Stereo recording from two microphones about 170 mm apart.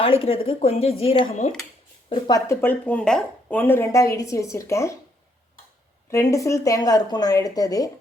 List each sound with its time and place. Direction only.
0.0 s speech: 35° left (ahead or behind)
2.0 s speech: 30° left (ahead or behind)
6.1 s a woman's voice: 15° left (ahead or behind)